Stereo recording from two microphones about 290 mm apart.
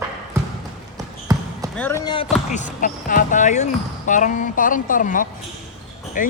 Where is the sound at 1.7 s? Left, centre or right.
Centre.